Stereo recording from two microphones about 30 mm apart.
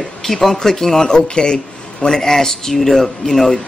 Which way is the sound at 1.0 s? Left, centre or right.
Left.